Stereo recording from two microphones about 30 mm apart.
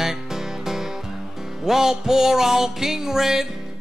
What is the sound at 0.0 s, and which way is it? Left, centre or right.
Music, centre.